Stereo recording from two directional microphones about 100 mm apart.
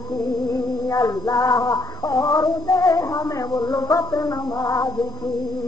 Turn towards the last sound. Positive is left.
turn(degrees=35)  # may be behind; listen again after turning